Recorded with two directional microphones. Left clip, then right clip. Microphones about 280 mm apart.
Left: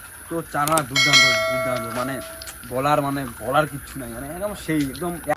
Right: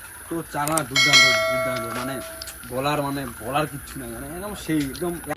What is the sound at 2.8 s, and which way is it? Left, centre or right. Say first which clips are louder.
Speech: left 4 dB; left.